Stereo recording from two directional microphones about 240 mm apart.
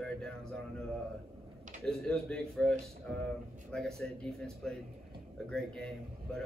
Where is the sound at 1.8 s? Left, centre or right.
Centre.